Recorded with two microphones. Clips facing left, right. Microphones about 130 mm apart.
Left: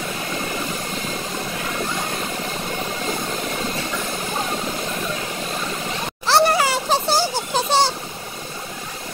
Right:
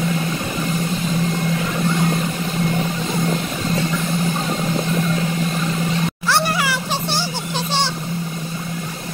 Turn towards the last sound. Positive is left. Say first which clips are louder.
# left 4 dB
turn(degrees=40)  # may be behind; listen again after turning